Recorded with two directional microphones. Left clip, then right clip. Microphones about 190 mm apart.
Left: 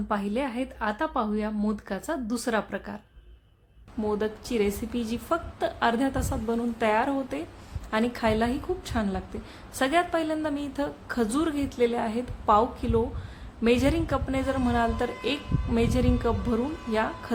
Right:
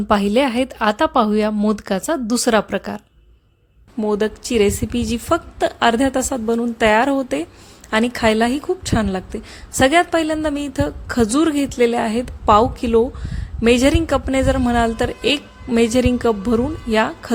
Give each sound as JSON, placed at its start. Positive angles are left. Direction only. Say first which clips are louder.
{"t": 0.1, "sound": "a woman's voice", "louder": "right 13 dB", "side_deg": -50}
{"t": 4.0, "sound": "a woman's voice", "louder": "right 9 dB", "side_deg": -35}